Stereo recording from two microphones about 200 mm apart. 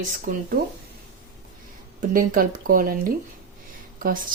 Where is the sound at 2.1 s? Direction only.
45° right (ahead or behind).